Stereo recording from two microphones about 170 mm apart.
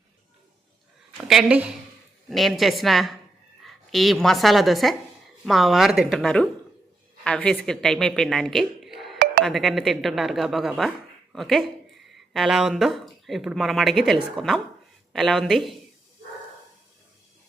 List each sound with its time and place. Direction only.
1.3 s a woman's voice: 5° right (ahead or behind)